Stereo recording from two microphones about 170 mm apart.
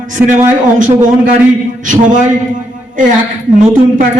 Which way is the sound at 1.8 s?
50° right (ahead or behind).